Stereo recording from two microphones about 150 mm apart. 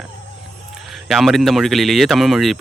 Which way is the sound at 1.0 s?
Centre (ahead or behind).